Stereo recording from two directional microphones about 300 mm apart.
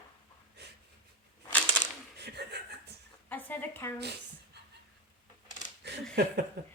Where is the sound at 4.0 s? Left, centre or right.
Right.